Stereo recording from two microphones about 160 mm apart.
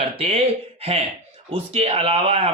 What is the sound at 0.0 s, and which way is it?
A man's voice, 40° right (ahead or behind).